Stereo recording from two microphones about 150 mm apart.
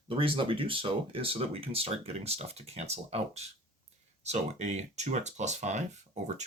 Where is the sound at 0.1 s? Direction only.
35° right (ahead or behind).